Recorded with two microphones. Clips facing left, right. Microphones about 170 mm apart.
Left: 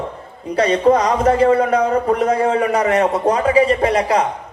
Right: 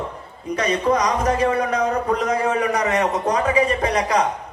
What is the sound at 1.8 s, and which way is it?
Speech, 55° left (ahead or behind).